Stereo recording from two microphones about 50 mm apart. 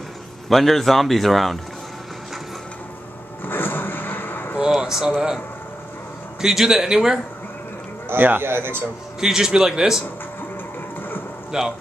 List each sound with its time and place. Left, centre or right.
0.5 s speech: centre
3.4 s vehicle: left
4.6 s a sound: centre
6.4 s speech: centre
8.1 s speech: right
9.2 s speech: centre
11.5 s speech: centre